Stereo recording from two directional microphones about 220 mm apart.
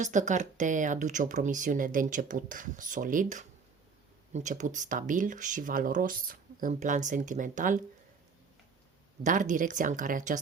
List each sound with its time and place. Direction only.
0.0 s speech: 35° right (ahead or behind)
9.2 s speech: 35° right (ahead or behind)